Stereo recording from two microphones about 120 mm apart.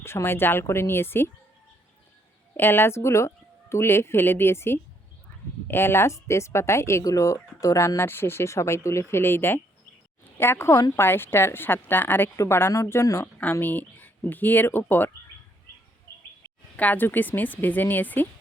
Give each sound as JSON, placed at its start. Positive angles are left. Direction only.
{"t": 0.0, "sound": "speech", "side_deg": 20}
{"t": 2.6, "sound": "speech", "side_deg": 20}
{"t": 16.7, "sound": "speech", "side_deg": 15}